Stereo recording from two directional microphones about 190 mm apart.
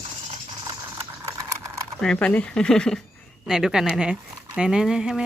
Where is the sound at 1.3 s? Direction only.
15° right (ahead or behind).